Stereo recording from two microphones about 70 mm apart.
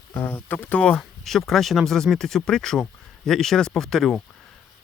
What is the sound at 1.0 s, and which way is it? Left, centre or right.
Speech, centre.